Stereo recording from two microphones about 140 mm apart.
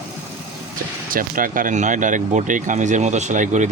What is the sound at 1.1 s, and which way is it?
Speech, 80° right.